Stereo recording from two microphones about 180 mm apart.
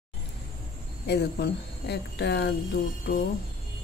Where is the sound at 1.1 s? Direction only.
65° left (ahead or behind).